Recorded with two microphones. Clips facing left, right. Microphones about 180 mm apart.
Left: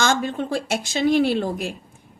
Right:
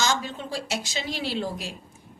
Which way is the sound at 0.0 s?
55° left (ahead or behind).